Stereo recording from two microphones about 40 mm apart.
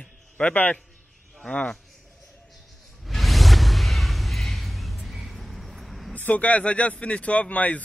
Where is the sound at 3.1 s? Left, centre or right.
Centre.